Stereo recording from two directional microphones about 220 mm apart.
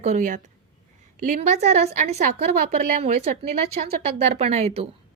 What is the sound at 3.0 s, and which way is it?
Speech, 30° right (ahead or behind).